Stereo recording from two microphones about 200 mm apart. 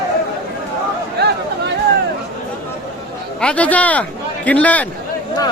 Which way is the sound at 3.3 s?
5° left (ahead or behind).